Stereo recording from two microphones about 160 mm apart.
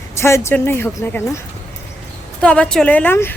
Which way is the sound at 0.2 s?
15° left (ahead or behind).